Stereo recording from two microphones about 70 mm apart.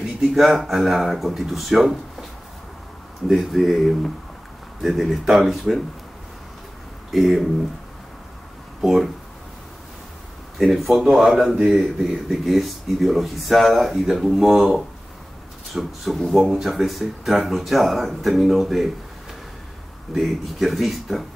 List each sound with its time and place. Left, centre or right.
0.2 s speech: centre
3.3 s speech: centre
7.1 s speech: centre
8.8 s speech: centre
10.6 s speech: centre
20.2 s speech: centre